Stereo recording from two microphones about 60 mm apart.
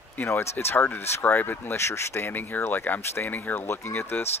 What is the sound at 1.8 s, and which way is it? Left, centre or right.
Speech, left.